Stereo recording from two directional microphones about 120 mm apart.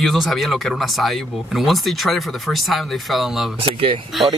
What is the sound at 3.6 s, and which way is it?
Speech, 45° right (ahead or behind).